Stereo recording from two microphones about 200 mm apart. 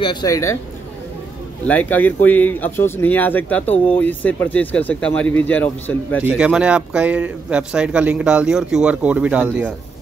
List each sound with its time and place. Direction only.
0.0 s speech: 20° left (ahead or behind)
1.7 s speech: 10° left (ahead or behind)
6.2 s a man's voice: 5° right (ahead or behind)